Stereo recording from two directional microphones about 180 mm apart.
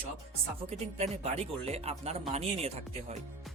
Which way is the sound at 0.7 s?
35° right (ahead or behind).